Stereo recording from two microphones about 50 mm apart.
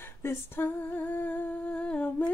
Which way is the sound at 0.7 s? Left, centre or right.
Left.